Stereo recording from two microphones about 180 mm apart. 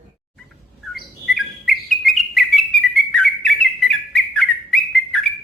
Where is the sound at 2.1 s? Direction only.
Centre (ahead or behind).